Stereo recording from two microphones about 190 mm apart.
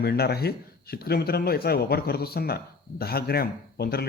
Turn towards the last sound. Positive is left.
turn(degrees=55)  # may be behind; listen again after turning